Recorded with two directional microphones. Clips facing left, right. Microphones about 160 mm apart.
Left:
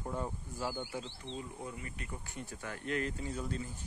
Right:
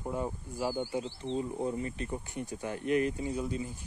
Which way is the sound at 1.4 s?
30° right (ahead or behind).